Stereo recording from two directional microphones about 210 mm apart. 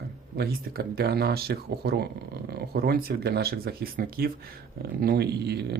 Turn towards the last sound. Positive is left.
turn(degrees=-50)  # may be behind; listen again after turning